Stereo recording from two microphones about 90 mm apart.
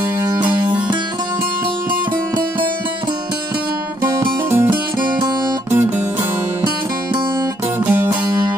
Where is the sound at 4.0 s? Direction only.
30° right (ahead or behind).